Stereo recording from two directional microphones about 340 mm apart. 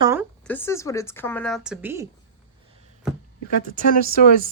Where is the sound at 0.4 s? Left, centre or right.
Centre.